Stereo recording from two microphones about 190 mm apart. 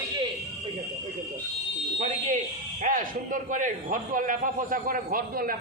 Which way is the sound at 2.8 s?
45° right (ahead or behind).